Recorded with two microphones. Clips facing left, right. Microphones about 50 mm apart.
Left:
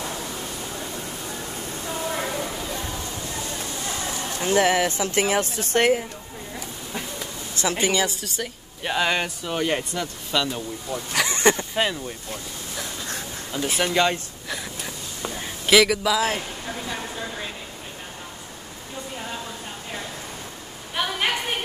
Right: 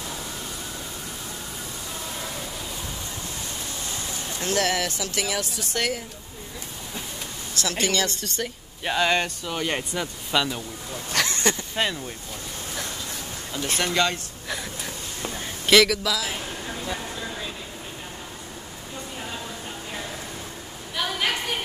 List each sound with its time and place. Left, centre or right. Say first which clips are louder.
4.4 s speech: left 5 dB; left
7.5 s speech: left 2 dB; left; by 9.8 s centre
9.8 s speech: even; centre
11.2 s a sound: left 5 dB; left
11.7 s speech: left 2 dB; centre
13.5 s speech: left 2 dB; centre
15.6 s speech: left 1 dB; centre
21.0 s a sound: left 2 dB; centre